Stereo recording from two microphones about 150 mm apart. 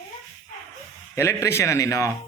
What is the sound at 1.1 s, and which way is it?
A man's voice, 20° left (ahead or behind).